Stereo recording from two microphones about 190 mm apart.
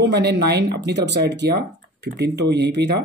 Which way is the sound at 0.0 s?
60° right (ahead or behind).